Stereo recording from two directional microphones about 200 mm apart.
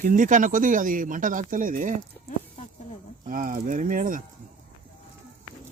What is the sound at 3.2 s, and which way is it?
Speech, 40° right (ahead or behind).